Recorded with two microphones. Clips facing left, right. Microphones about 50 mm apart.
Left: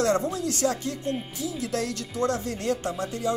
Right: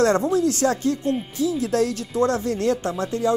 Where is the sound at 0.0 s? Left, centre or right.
Right.